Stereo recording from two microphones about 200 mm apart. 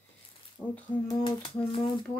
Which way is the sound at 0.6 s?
5° right (ahead or behind).